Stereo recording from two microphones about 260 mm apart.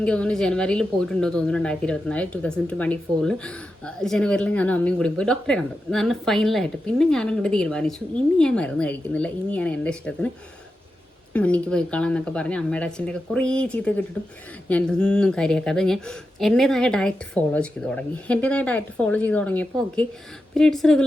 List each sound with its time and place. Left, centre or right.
0.0 s a woman's voice: centre
11.3 s a woman's voice: centre